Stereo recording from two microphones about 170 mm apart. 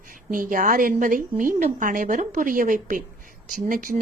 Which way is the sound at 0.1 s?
55° right (ahead or behind).